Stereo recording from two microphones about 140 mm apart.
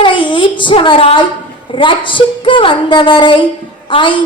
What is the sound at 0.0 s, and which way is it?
A woman's voice, 35° left (ahead or behind).